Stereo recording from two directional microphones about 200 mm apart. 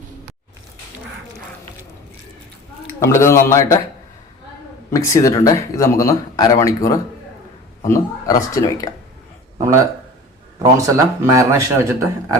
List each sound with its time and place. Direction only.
3.0 s speech: 15° left (ahead or behind)
4.9 s speech: 15° left (ahead or behind)
9.6 s speech: 15° right (ahead or behind)